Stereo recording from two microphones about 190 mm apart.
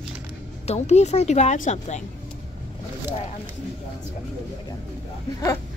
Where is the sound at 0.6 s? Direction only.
35° left (ahead or behind).